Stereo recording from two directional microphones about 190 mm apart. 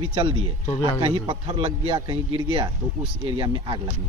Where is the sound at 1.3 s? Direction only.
30° right (ahead or behind).